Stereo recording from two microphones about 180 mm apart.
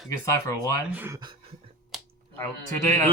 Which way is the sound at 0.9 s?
15° right (ahead or behind).